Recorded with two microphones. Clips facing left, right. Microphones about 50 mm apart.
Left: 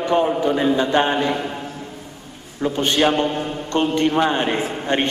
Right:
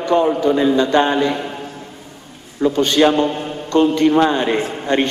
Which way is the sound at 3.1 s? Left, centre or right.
Centre.